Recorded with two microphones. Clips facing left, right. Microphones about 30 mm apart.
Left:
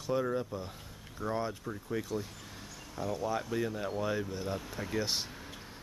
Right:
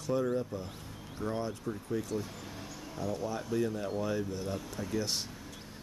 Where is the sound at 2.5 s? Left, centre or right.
Centre.